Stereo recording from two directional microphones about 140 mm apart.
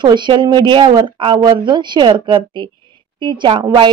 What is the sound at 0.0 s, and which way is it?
A woman's voice, 35° right (ahead or behind).